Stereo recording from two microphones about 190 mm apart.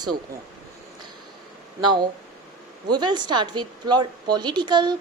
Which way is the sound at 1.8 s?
25° right (ahead or behind).